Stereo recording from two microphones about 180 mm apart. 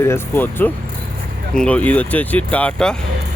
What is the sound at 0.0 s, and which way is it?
Speech, 15° left (ahead or behind).